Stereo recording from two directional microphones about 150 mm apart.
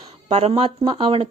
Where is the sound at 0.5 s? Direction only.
35° right (ahead or behind).